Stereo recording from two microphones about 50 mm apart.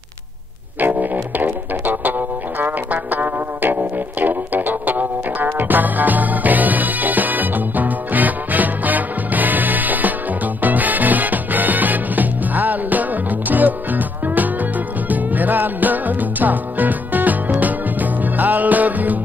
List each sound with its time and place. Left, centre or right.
0.7 s music: right